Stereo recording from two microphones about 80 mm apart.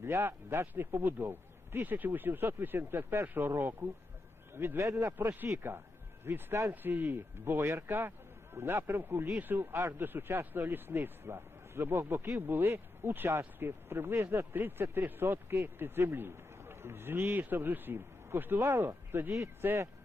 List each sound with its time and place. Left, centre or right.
0.0 s a man's voice: right